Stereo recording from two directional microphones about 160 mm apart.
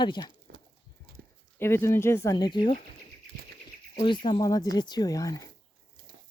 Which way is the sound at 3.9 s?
30° left (ahead or behind).